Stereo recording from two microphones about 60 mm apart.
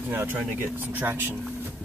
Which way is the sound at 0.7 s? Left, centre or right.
Right.